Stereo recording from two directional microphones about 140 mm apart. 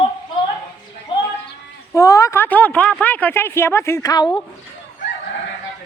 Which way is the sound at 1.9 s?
25° left (ahead or behind).